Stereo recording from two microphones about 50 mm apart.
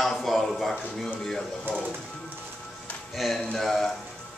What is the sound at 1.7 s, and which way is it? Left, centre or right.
Speech, right.